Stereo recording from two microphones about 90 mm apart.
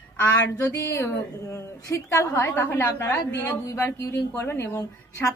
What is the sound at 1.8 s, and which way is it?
Speech, 35° left (ahead or behind).